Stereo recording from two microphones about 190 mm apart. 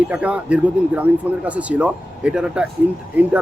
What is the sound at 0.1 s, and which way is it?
Speech, 5° right (ahead or behind).